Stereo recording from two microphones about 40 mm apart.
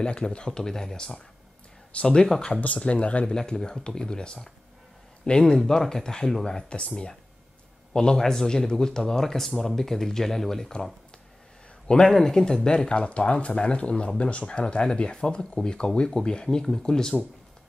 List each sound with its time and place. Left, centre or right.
0.0 s speech: left
2.6 s speech: left
3.3 s speech: centre
7.9 s speech: centre
11.9 s speech: left